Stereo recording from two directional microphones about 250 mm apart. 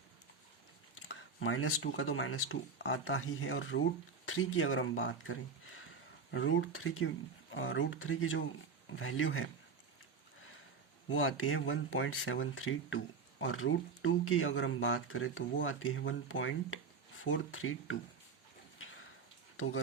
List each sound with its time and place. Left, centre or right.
1.0 s speech: left
11.1 s speech: left